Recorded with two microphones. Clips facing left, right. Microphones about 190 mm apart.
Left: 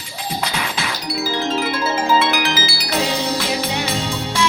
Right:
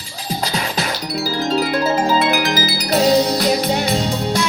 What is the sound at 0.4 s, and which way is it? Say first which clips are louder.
Music: right 4 dB; 35° right (ahead or behind).